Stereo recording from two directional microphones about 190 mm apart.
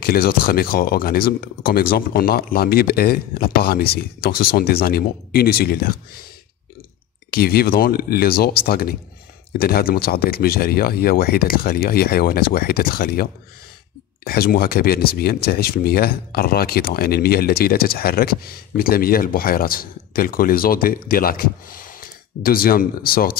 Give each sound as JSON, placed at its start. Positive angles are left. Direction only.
{"t": 0.0, "sound": "speech", "side_deg": 50}
{"t": 7.2, "sound": "speech", "side_deg": 55}